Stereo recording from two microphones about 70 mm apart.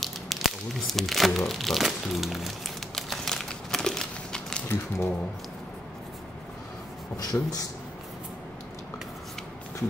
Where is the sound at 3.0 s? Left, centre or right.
Centre.